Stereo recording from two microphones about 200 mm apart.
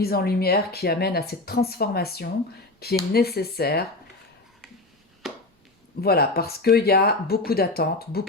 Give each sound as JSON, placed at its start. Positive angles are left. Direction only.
{"t": 0.0, "sound": "speech", "side_deg": 50}
{"t": 6.0, "sound": "speech", "side_deg": 50}